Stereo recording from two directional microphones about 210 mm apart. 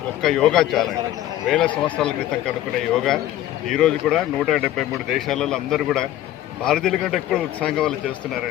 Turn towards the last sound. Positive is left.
turn(degrees=5)  # may be behind; listen again after turning